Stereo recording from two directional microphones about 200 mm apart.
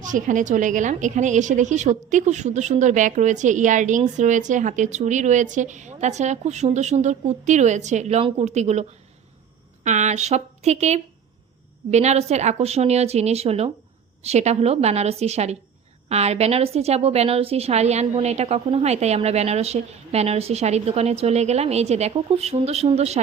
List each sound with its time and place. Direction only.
0.0 s a woman's voice: 40° right (ahead or behind)